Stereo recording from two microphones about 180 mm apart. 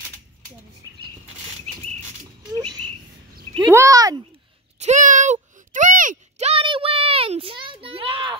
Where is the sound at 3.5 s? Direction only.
20° right (ahead or behind).